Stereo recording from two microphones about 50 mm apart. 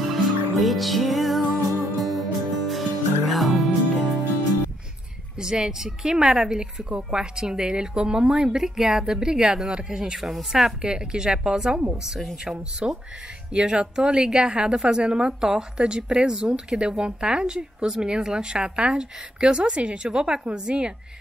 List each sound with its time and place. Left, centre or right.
0.0 s music: centre
5.4 s a woman's voice: centre
10.8 s a woman's voice: centre